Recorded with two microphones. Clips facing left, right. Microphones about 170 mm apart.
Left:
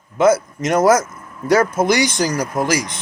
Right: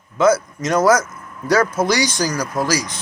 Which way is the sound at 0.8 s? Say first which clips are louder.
Left 1 dB; 25° left (ahead or behind).